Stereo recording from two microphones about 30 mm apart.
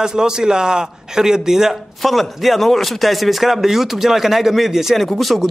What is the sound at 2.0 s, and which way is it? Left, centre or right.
A man's voice, centre.